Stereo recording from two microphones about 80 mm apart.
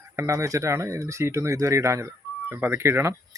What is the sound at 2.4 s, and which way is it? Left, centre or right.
Speech, right.